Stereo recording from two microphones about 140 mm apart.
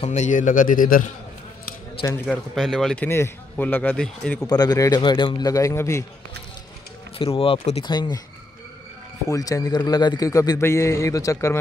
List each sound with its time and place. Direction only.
0.0 s a man's voice: 55° left (ahead or behind); by 1.1 s 80° left
2.2 s speech: 5° left (ahead or behind)
3.1 s a man's voice: 15° left (ahead or behind)
4.5 s a man's voice: 30° left (ahead or behind)
7.2 s speech: 40° left (ahead or behind)
7.8 s speech: 30° left (ahead or behind)
9.3 s a man's voice: 25° left (ahead or behind)